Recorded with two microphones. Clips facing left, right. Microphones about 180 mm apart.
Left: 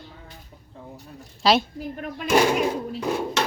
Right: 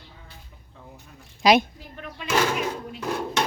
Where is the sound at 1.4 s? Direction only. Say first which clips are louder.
Right 2 dB; 15° right (ahead or behind).